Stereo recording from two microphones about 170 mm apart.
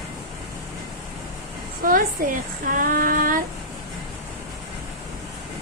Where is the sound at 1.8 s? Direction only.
55° right (ahead or behind).